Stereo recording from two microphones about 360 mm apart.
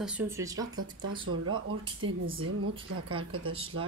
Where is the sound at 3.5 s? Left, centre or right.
Centre.